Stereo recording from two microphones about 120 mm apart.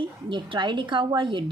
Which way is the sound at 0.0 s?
45° right (ahead or behind).